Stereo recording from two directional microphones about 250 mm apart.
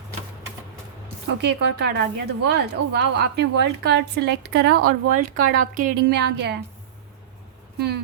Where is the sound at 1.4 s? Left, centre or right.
Right.